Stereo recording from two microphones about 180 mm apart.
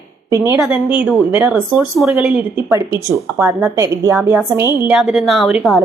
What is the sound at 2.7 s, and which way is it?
A woman's voice, 15° right (ahead or behind).